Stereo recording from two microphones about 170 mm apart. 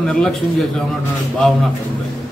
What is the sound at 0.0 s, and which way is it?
Speech, 5° left (ahead or behind).